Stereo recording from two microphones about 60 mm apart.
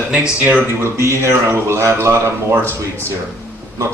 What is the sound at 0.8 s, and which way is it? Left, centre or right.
Speech, right.